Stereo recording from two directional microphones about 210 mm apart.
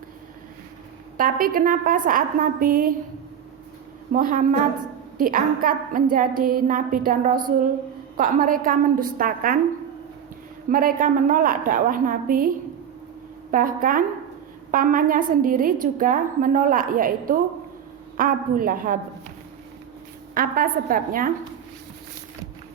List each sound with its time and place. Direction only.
1.1 s a woman's voice: 40° right (ahead or behind)
4.1 s a woman's voice: 40° right (ahead or behind)
10.7 s a woman's voice: 40° right (ahead or behind)
13.5 s a woman's voice: 40° right (ahead or behind)
20.3 s a woman's voice: 40° right (ahead or behind)